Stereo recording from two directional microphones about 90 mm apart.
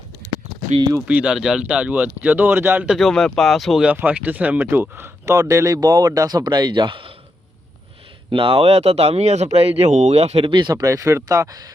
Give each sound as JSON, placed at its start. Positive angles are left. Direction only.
{"t": 1.0, "sound": "speech", "side_deg": -10}
{"t": 2.8, "sound": "speech", "side_deg": 0}
{"t": 3.8, "sound": "speech", "side_deg": -15}
{"t": 8.3, "sound": "speech", "side_deg": -75}
{"t": 10.8, "sound": "speech", "side_deg": -35}